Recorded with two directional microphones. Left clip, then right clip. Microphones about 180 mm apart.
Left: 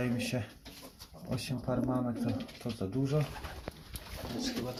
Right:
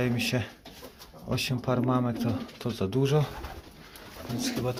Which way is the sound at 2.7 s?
45° right (ahead or behind).